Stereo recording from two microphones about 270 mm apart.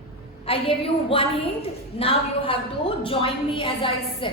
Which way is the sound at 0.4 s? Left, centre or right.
Left.